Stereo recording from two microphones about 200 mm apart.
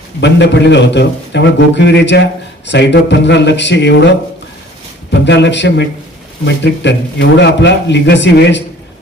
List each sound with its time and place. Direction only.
0.2 s a man's voice: 60° left (ahead or behind)
5.2 s a man's voice: 60° left (ahead or behind)